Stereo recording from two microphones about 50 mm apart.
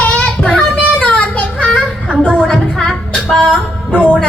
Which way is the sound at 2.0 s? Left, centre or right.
Right.